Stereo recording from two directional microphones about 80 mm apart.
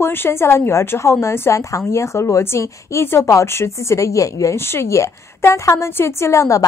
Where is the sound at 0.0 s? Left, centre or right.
Left.